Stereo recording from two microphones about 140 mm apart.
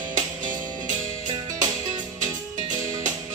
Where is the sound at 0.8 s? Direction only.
60° right (ahead or behind).